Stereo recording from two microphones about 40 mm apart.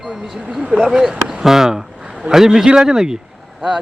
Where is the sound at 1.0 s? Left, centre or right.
Centre.